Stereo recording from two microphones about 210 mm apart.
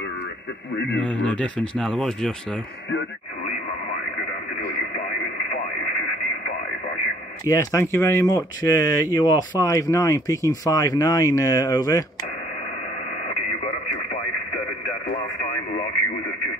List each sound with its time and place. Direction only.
0.9 s speech: 5° left (ahead or behind)
7.4 s speech: 15° left (ahead or behind)